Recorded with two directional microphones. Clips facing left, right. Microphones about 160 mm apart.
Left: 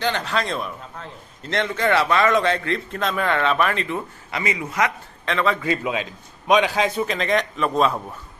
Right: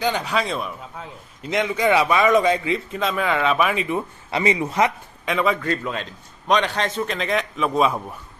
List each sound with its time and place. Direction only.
0.0 s a man's voice: 10° right (ahead or behind)
4.3 s a man's voice: 25° right (ahead or behind)
5.2 s a man's voice: 10° right (ahead or behind)
5.6 s a man's voice: 5° left (ahead or behind)